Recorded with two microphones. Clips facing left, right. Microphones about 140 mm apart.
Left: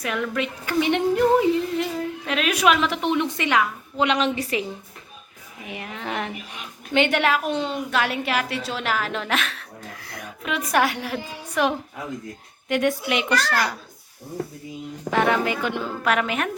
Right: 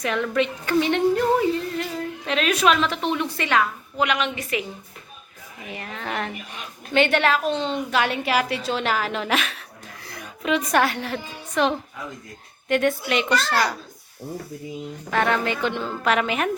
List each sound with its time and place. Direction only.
0.0 s a woman's voice: 5° left (ahead or behind)
2.2 s a woman's voice: 5° left (ahead or behind)
4.0 s a woman's voice: 30° left (ahead or behind)
5.7 s a woman's voice: 15° left (ahead or behind)
15.1 s a woman's voice: 10° left (ahead or behind)